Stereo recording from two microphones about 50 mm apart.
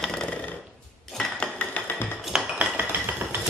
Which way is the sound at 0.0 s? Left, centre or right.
Centre.